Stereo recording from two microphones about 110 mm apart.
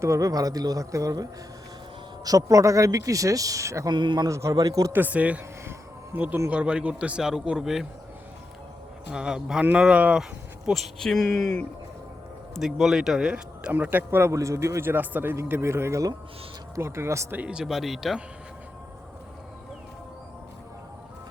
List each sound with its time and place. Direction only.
0.0 s speech: 30° right (ahead or behind)
3.9 s a man's voice: 45° right (ahead or behind)
4.3 s speech: 25° right (ahead or behind)
4.9 s speech: 15° right (ahead or behind)
9.1 s speech: 5° right (ahead or behind)
10.7 s speech: centre (ahead or behind); by 17.4 s 25° right (ahead or behind)
17.4 s speech: 5° right (ahead or behind)